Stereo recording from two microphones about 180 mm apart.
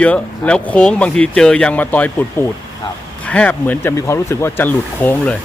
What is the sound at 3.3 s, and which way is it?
Speech, 10° left (ahead or behind).